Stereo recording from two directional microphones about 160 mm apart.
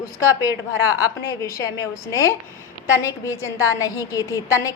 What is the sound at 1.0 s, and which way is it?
A woman's voice, 20° left (ahead or behind).